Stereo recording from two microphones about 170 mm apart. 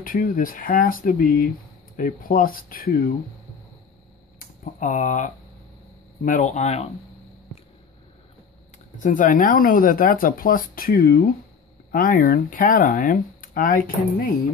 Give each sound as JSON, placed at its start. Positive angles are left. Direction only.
{"t": 0.0, "sound": "speech", "side_deg": 55}
{"t": 4.7, "sound": "speech", "side_deg": 50}
{"t": 8.9, "sound": "speech", "side_deg": 50}